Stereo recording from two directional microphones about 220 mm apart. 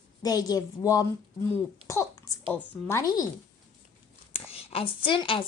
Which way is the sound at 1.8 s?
15° left (ahead or behind).